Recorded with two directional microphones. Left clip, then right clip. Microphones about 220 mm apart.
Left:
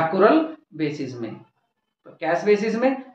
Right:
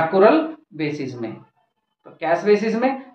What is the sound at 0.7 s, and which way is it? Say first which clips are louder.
Speech: right 1 dB; 10° right (ahead or behind).